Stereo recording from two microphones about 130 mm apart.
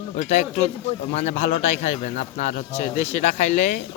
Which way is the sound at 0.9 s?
60° left (ahead or behind).